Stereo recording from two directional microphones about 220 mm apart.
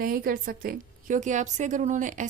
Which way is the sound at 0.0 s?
40° right (ahead or behind).